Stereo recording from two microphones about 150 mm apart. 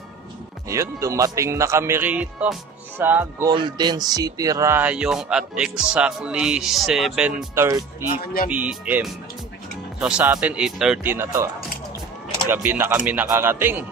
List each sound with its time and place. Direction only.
0.7 s speech: 20° right (ahead or behind)
3.4 s speech: 30° right (ahead or behind); by 7.4 s 5° right (ahead or behind)
7.5 s speech: 20° right (ahead or behind)
8.5 s speech: 10° right (ahead or behind)
12.4 s speech: 15° right (ahead or behind)